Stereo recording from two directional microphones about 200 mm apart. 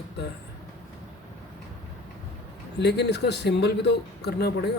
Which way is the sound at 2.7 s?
55° left (ahead or behind).